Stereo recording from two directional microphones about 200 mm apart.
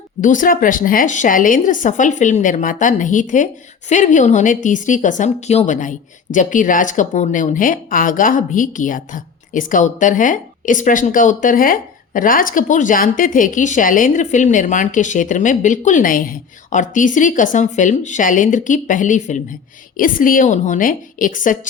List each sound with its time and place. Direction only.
0.2 s a woman's voice: 40° left (ahead or behind)